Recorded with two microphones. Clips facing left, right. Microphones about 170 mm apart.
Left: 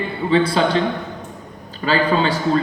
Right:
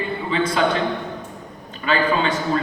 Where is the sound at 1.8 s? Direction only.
35° left (ahead or behind).